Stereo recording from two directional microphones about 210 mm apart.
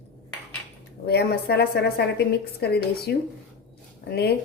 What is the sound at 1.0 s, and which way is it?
A woman's voice, 50° left (ahead or behind).